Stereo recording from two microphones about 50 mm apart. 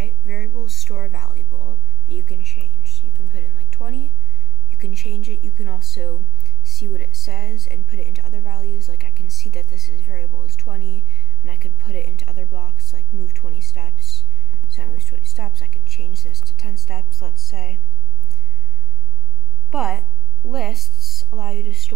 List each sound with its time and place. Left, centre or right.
0.0 s a sound: centre
2.8 s a woman's voice: centre
19.7 s speech: centre